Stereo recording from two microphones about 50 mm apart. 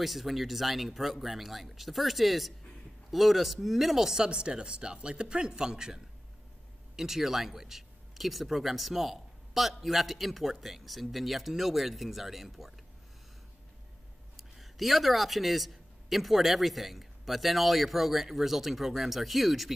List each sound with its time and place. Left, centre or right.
0.0 s speech: centre
7.0 s speech: centre
14.3 s a man's voice: centre